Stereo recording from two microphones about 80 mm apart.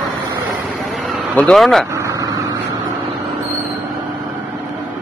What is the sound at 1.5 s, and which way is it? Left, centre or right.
Speech, centre.